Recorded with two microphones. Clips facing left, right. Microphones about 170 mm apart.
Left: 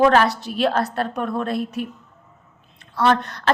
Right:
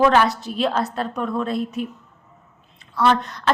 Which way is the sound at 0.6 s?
65° left (ahead or behind).